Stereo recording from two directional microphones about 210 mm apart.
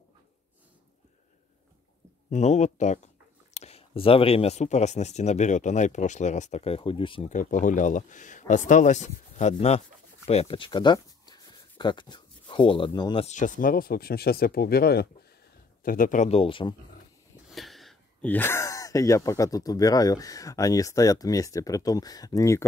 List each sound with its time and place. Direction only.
2.2 s speech: 35° left (ahead or behind)
17.5 s speech: centre (ahead or behind)